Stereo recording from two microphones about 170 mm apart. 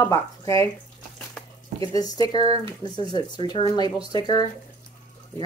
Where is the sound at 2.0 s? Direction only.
20° left (ahead or behind).